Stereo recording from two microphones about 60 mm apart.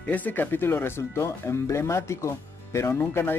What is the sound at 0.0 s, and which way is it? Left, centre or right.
Speech, left.